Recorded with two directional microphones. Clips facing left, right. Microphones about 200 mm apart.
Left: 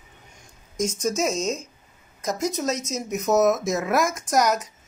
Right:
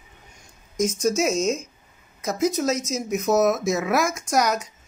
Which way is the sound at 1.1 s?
35° left (ahead or behind).